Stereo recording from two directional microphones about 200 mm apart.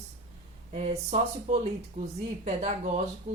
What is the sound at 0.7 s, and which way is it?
Speech, 30° right (ahead or behind).